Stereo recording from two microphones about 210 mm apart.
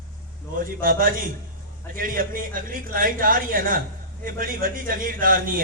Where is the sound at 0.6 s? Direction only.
40° right (ahead or behind).